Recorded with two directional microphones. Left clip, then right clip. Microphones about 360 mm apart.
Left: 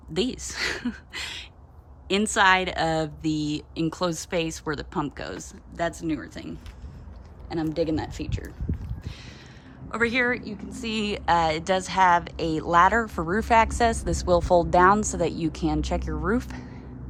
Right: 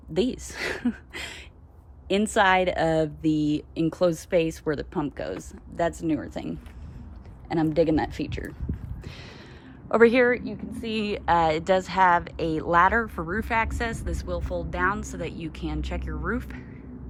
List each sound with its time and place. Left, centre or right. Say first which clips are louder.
0.1 s a woman's voice: right 1 dB; centre
7.4 s speech: right 4 dB; centre
9.9 s a woman's voice: right 5 dB; centre